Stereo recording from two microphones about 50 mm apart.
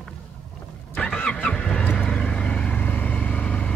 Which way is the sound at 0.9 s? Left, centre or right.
Left.